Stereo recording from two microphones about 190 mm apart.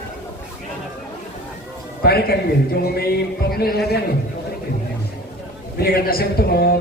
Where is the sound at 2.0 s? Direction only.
55° left (ahead or behind).